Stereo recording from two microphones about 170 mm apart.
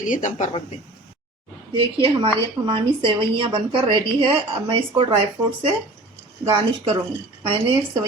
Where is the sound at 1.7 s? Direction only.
30° right (ahead or behind).